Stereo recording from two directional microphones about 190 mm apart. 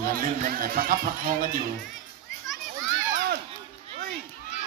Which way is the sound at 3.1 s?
60° right (ahead or behind).